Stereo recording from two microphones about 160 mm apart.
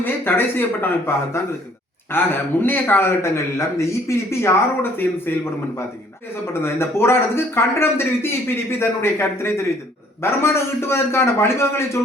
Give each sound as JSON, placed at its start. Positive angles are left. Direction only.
{"t": 0.0, "sound": "a man's voice", "side_deg": 15}
{"t": 6.5, "sound": "a man's voice", "side_deg": 15}